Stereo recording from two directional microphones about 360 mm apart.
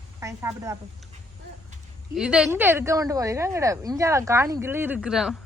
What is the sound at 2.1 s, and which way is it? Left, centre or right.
Speech, centre.